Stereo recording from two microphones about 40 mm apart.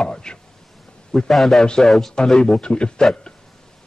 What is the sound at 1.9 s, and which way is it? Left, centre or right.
Speech, centre.